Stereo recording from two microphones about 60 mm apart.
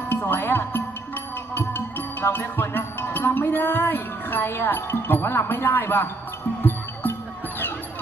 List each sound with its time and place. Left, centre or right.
0.1 s music: left